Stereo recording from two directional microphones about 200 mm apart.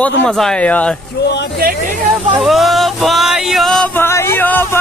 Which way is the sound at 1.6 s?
45° right (ahead or behind).